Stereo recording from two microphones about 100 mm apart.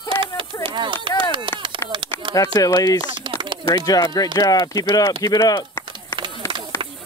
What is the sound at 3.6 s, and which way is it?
Speech, 35° left (ahead or behind).